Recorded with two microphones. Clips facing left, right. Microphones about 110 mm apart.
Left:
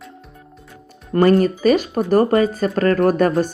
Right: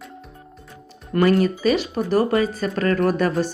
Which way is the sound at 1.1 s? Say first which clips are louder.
Left 3 dB; 40° left (ahead or behind).